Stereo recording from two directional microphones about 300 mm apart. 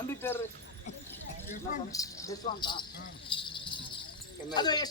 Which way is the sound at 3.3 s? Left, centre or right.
Centre.